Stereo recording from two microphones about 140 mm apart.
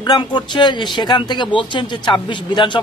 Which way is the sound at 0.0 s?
30° left (ahead or behind).